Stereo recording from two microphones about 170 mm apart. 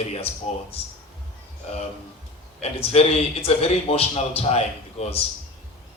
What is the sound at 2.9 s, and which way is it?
A man's voice, 35° left (ahead or behind).